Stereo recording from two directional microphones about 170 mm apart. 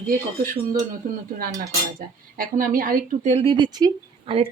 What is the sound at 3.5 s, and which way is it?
Speech, 25° right (ahead or behind).